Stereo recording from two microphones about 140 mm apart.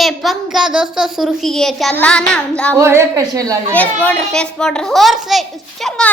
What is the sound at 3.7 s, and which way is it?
A child's voice, 10° left (ahead or behind).